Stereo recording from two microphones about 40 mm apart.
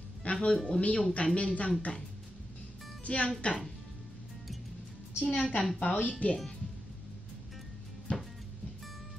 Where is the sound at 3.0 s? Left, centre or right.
Left.